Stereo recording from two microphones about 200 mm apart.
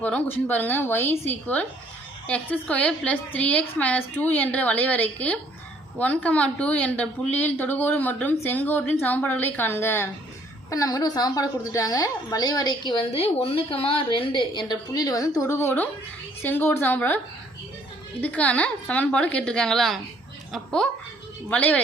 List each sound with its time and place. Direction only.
0.0 s a woman's voice: 10° left (ahead or behind)
18.2 s a woman's voice: 5° left (ahead or behind)